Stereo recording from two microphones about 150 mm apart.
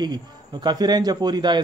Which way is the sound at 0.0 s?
30° right (ahead or behind).